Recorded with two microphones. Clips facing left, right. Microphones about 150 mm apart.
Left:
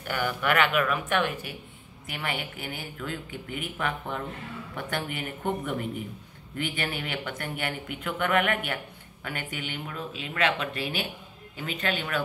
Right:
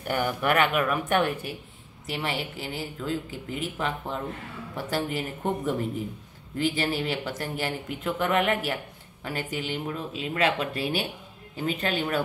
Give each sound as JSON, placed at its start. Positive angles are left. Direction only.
{"t": 0.1, "sound": "a woman's voice", "side_deg": -40}